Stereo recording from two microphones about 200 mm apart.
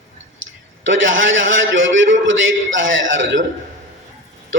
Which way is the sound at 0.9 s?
70° right (ahead or behind).